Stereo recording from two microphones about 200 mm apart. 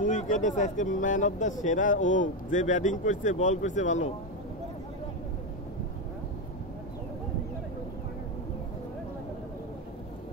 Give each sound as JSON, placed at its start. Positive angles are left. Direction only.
{"t": 0.0, "sound": "speech", "side_deg": 40}